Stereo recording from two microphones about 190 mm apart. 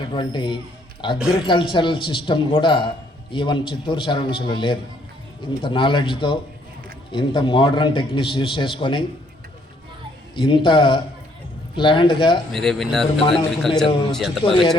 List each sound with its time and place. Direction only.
0.0 s a man's voice: 25° left (ahead or behind)
10.3 s a man's voice: 25° left (ahead or behind)
12.5 s speech: centre (ahead or behind)